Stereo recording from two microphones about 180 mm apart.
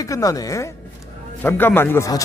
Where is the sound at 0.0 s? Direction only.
20° left (ahead or behind).